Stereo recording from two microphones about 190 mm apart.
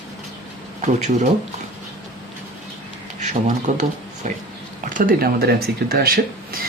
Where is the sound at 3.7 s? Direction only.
40° right (ahead or behind).